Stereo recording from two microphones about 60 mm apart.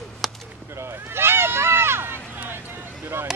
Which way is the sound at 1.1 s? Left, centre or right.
Right.